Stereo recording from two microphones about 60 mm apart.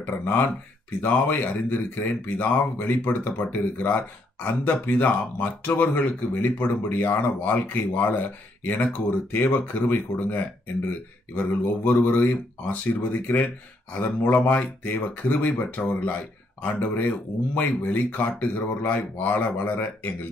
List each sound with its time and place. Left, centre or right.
0.0 s speech: left